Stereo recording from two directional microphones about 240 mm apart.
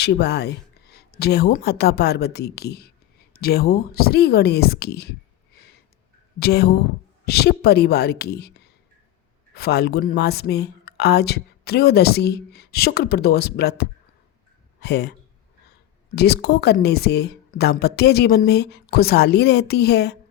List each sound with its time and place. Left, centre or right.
0.0 s speech: left
6.4 s a woman's voice: left
16.1 s speech: left